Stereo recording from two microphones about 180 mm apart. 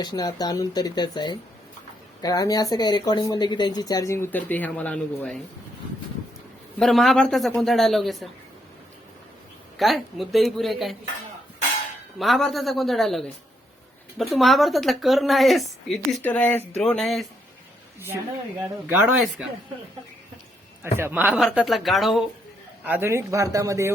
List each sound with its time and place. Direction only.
0.0 s speech: 20° left (ahead or behind)
6.7 s a woman's voice: centre (ahead or behind)
9.7 s a woman's voice: centre (ahead or behind)
12.2 s a woman's voice: centre (ahead or behind)
18.9 s speech: 5° right (ahead or behind)
20.8 s a woman's voice: 15° right (ahead or behind)
22.8 s speech: 10° right (ahead or behind)